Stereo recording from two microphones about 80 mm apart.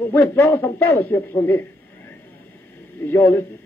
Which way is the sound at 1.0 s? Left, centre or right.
Left.